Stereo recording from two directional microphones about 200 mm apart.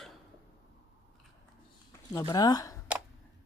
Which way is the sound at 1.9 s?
15° left (ahead or behind).